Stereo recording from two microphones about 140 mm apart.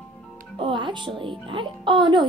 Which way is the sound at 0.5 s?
35° right (ahead or behind).